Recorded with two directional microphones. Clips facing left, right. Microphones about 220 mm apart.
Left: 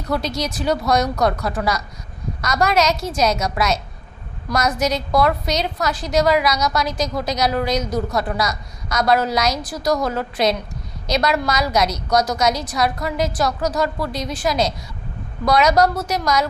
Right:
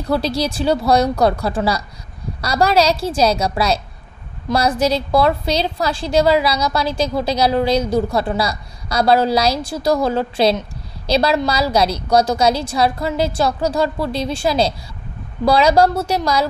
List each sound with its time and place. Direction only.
0.1 s a woman's voice: 30° right (ahead or behind)